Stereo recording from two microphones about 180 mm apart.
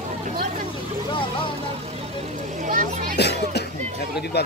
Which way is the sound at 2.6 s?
45° right (ahead or behind).